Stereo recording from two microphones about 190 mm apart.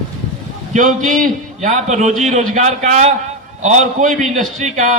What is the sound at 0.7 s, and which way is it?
A man's voice, 45° right (ahead or behind).